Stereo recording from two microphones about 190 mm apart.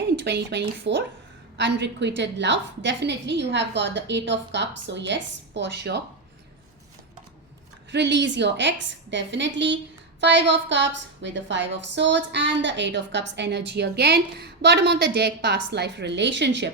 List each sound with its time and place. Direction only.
0.2 s a woman's voice: 65° right (ahead or behind)
7.9 s a woman's voice: 65° right (ahead or behind)